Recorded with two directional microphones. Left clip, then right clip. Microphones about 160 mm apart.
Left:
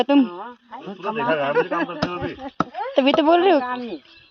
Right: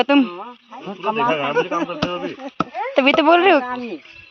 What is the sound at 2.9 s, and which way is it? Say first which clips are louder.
Speech: right 3 dB; 15° left (ahead or behind).